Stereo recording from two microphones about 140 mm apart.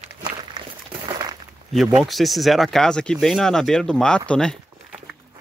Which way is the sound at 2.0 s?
Centre (ahead or behind).